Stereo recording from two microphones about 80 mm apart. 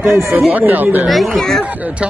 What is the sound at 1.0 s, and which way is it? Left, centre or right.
Speech, centre.